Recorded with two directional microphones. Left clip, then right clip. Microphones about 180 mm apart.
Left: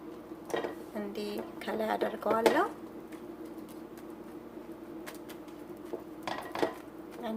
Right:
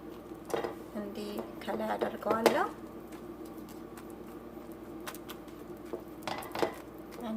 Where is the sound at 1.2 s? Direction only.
50° left (ahead or behind).